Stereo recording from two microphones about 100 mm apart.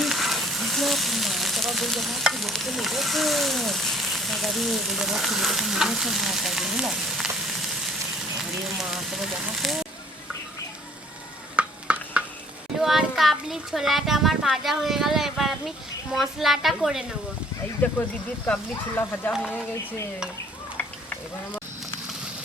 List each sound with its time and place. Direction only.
0.0 s frying: centre (ahead or behind)
8.4 s speech: 5° right (ahead or behind)
11.5 s a sound: 10° right (ahead or behind)
12.8 s a child's voice: 5° right (ahead or behind)
18.4 s speech: 15° left (ahead or behind)